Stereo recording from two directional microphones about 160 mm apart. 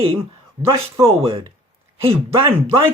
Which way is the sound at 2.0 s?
35° right (ahead or behind).